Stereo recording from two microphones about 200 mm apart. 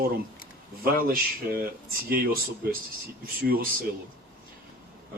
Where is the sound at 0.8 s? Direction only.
45° right (ahead or behind).